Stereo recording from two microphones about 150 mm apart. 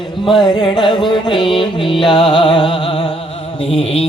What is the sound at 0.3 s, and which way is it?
Music, 30° left (ahead or behind).